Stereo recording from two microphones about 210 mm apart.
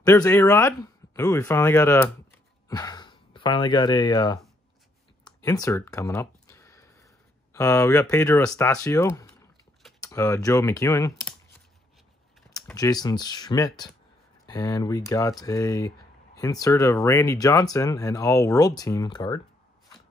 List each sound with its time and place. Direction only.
0.0 s speech: 15° left (ahead or behind)
5.2 s a sound: 15° left (ahead or behind)
7.5 s speech: 15° left (ahead or behind)
12.7 s speech: 20° left (ahead or behind)